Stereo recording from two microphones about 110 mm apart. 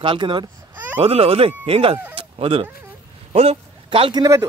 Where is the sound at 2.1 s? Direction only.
60° right (ahead or behind).